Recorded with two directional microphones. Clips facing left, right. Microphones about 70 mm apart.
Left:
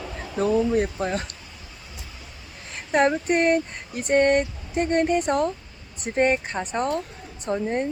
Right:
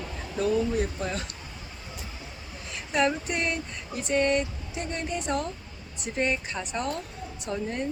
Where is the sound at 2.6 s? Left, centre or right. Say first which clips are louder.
Left 5 dB; left.